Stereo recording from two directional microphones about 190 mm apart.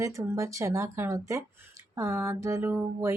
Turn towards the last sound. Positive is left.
turn(degrees=-10)  # may be behind; listen again after turning